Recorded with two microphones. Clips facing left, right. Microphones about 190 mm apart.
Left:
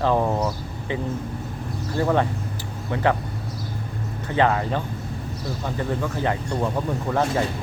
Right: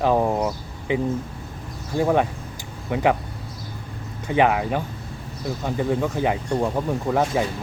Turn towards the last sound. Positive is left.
turn(degrees=-10)  # may be behind; listen again after turning